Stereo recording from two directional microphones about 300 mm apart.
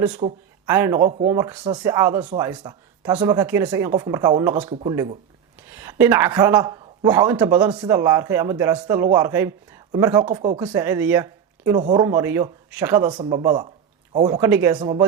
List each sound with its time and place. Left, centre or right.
0.2 s a woman's voice: centre
2.5 s a woman's voice: centre